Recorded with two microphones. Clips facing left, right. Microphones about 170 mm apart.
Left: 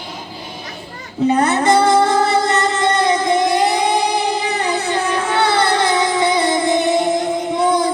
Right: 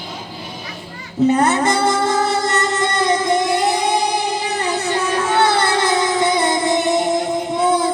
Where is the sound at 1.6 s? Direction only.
55° left (ahead or behind).